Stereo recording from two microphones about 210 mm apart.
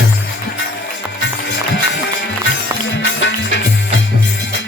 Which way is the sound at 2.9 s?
60° left (ahead or behind).